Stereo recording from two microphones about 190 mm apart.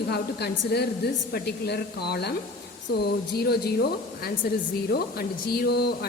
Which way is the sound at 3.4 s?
55° left (ahead or behind).